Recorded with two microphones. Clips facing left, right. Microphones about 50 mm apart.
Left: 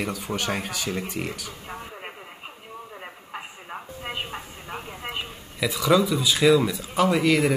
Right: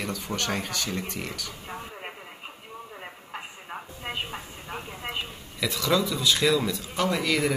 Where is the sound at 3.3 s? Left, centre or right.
Centre.